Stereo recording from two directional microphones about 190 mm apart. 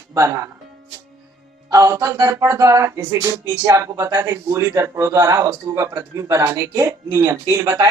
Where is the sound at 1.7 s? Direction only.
15° right (ahead or behind).